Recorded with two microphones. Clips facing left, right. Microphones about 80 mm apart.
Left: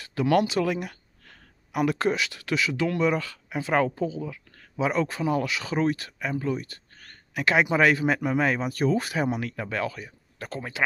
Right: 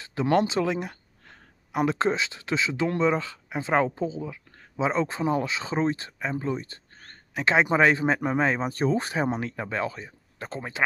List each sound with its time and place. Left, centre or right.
0.0 s speech: right